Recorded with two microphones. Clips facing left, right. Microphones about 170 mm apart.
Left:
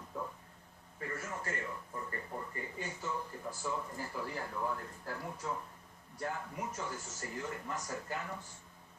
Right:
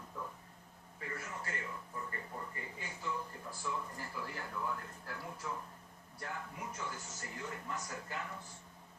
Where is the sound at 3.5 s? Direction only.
45° left (ahead or behind).